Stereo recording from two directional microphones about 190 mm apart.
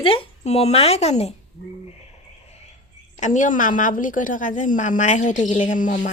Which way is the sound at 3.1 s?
40° left (ahead or behind).